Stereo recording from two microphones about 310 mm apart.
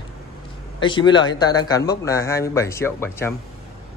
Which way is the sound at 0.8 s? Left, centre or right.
Centre.